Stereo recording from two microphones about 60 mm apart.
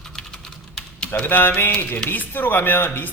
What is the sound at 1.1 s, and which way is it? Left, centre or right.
Speech, left.